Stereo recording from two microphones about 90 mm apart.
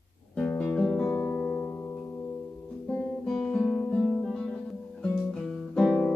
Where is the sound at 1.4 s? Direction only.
15° left (ahead or behind).